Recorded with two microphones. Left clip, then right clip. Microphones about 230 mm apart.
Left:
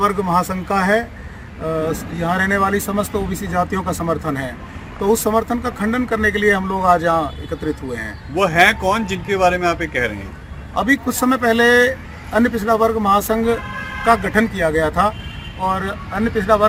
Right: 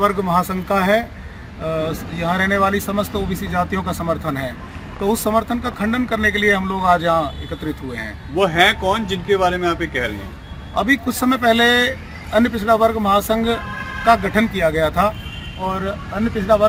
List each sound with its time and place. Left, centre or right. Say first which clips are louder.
0.0 s speech: even; centre
8.4 s a man's voice: left 1 dB; left
10.8 s a man's voice: left 1 dB; centre